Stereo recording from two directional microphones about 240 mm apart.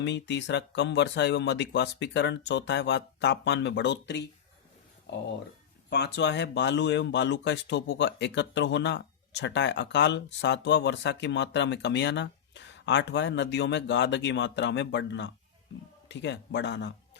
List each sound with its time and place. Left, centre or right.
0.0 s speech: left
5.9 s speech: left